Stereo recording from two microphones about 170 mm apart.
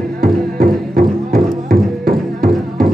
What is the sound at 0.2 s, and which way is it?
Music, 60° right (ahead or behind).